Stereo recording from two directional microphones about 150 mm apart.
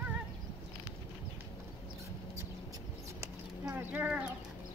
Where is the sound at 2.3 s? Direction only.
20° right (ahead or behind).